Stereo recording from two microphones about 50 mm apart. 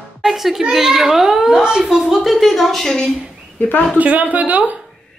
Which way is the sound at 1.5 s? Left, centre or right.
Centre.